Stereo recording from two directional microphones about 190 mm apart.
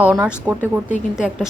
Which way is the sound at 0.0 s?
10° right (ahead or behind).